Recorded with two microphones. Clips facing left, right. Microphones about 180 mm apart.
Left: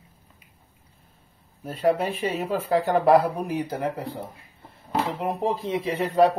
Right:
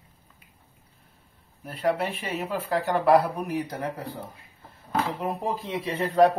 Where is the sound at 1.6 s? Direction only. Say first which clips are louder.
Left 3 dB; 35° left (ahead or behind).